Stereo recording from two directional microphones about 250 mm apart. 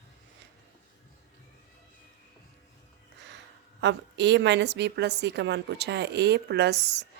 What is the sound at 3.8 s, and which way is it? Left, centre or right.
A woman's voice, right.